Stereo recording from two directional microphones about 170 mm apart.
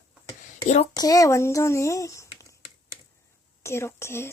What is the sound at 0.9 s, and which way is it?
Speech, 20° left (ahead or behind).